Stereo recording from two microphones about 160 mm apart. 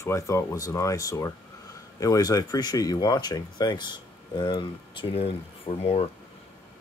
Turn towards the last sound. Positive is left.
turn(degrees=40)  # may be behind; listen again after turning